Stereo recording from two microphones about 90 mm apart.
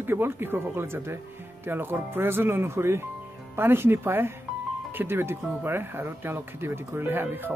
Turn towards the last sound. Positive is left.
turn(degrees=-20)  # may be behind; listen again after turning